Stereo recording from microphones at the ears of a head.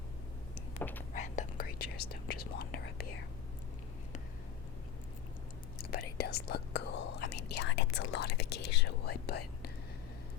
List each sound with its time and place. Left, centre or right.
1.1 s whispering: left
5.9 s whispering: left